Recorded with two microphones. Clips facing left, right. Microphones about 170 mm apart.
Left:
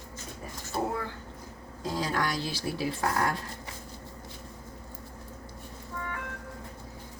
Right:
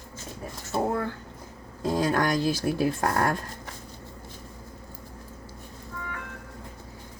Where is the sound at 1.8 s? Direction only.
55° right (ahead or behind).